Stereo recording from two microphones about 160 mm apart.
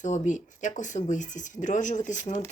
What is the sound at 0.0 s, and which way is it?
A woman's voice, 50° left (ahead or behind).